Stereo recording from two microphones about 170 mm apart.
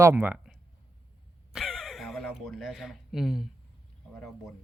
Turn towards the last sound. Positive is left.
turn(degrees=0)  # may be behind; listen again after turning